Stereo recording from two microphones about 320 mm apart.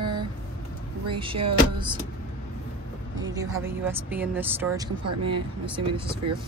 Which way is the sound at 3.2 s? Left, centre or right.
Centre.